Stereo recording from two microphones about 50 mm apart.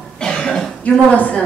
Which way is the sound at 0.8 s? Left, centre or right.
Left.